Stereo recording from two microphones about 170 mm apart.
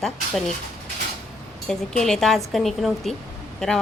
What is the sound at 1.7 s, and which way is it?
A woman's voice, 5° left (ahead or behind).